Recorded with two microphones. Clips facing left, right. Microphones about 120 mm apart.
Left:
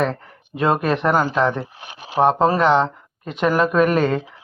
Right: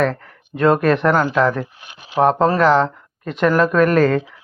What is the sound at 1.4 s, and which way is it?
Speech, 25° left (ahead or behind).